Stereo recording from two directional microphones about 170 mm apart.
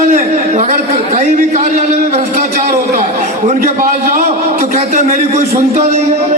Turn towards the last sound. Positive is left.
turn(degrees=-40)  # may be behind; listen again after turning